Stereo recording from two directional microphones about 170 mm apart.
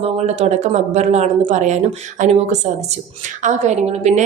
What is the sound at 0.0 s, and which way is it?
A woman's voice, 40° right (ahead or behind).